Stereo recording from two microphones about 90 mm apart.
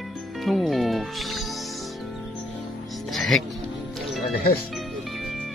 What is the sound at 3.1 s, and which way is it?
Music, centre (ahead or behind).